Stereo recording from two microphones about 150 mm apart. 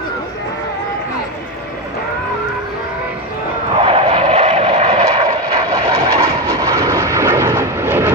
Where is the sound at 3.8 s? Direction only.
40° right (ahead or behind).